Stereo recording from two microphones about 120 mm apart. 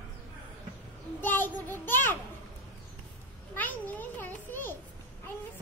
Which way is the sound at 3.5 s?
15° left (ahead or behind).